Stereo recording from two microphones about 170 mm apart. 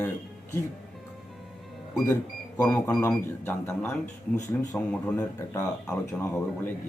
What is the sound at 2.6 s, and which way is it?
A man's voice, 20° left (ahead or behind).